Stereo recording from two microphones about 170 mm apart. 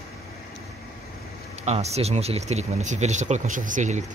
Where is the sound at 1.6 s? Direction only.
40° right (ahead or behind).